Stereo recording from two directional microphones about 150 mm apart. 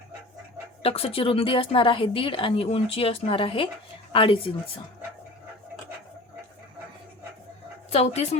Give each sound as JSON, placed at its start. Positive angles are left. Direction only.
{"t": 0.8, "sound": "a woman's voice", "side_deg": 40}
{"t": 7.9, "sound": "speech", "side_deg": 45}